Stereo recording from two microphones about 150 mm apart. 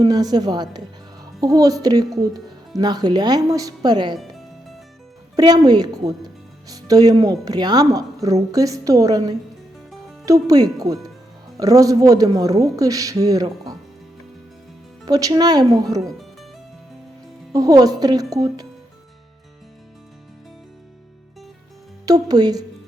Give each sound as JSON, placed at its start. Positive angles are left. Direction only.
{"t": 0.0, "sound": "speech", "side_deg": -25}
{"t": 4.1, "sound": "music", "side_deg": 0}
{"t": 5.4, "sound": "speech", "side_deg": -25}
{"t": 15.0, "sound": "speech", "side_deg": -25}
{"t": 17.5, "sound": "speech", "side_deg": -25}
{"t": 22.0, "sound": "speech", "side_deg": -25}